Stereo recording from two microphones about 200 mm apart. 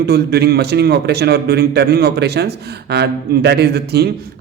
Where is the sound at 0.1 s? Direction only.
55° right (ahead or behind).